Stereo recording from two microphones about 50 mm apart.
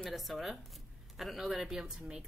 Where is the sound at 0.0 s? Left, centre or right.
Centre.